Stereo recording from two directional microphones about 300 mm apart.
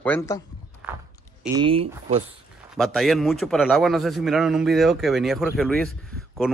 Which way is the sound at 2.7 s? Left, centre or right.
Centre.